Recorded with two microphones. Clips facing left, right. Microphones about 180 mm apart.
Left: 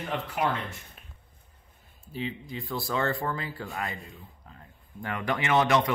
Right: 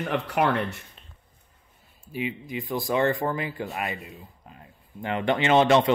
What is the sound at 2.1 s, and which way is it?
Speech, 15° right (ahead or behind).